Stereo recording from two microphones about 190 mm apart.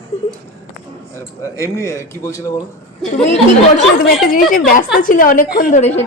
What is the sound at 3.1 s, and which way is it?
Speech, 35° left (ahead or behind).